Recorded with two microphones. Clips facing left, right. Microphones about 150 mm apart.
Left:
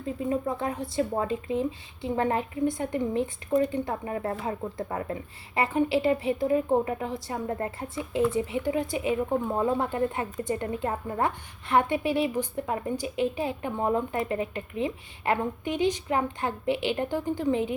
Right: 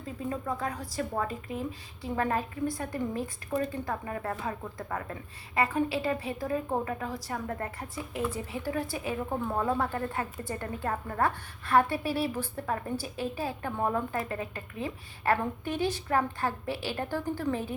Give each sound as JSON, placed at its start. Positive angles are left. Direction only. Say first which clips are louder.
{"t": 0.0, "sound": "a woman's voice", "louder": "left 6 dB", "side_deg": 25}